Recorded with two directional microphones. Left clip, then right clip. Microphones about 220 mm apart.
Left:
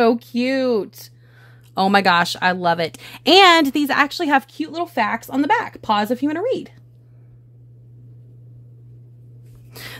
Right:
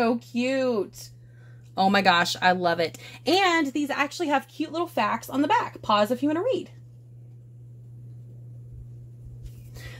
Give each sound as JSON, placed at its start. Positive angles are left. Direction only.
{"t": 0.0, "sound": "speech", "side_deg": 55}
{"t": 1.8, "sound": "a woman's voice", "side_deg": 35}